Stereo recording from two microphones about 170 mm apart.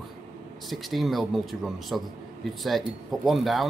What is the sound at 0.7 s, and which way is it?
A man's voice, centre (ahead or behind).